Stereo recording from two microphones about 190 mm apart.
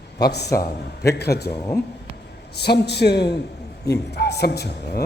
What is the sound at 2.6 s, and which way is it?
A man's voice, 60° left (ahead or behind).